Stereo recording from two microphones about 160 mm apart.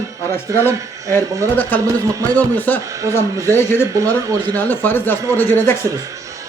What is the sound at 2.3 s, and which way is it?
Speech, 10° left (ahead or behind).